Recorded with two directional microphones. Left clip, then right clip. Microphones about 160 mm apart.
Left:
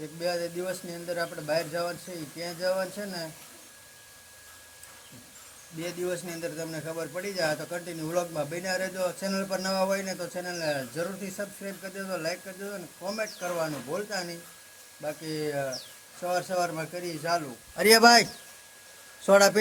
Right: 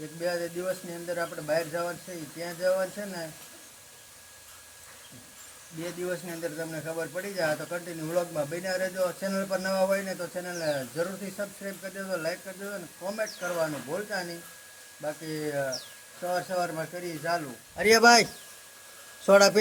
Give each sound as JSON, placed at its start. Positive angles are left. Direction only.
{"t": 0.2, "sound": "speech", "side_deg": 10}
{"t": 5.8, "sound": "speech", "side_deg": 5}
{"t": 17.7, "sound": "a man's voice", "side_deg": 50}
{"t": 19.2, "sound": "a man's voice", "side_deg": -5}